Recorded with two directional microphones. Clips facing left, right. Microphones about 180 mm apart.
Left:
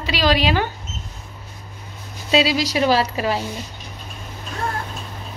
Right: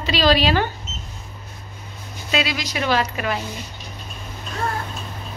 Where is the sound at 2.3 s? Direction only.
30° left (ahead or behind).